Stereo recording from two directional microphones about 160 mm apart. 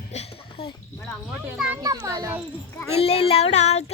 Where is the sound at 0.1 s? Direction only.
40° left (ahead or behind).